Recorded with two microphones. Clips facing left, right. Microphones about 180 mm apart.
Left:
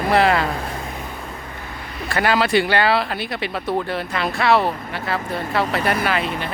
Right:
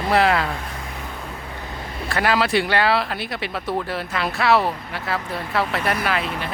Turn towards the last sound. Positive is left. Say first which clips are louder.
# left 2 dB
turn(degrees=0)  # may be behind; listen again after turning